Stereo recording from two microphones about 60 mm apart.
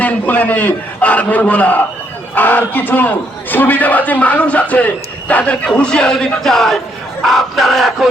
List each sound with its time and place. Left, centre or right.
0.0 s a man's voice: left
5.3 s music: left; by 6.7 s centre
7.2 s a sound: centre